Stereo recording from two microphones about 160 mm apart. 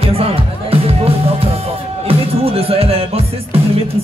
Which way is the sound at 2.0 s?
35° right (ahead or behind).